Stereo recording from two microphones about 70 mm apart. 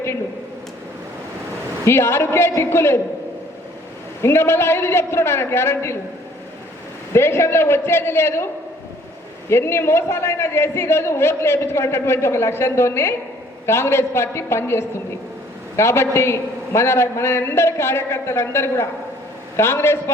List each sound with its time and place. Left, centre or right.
1.9 s a man's voice: left
4.2 s a man's voice: left
7.1 s a man's voice: left
9.5 s a man's voice: left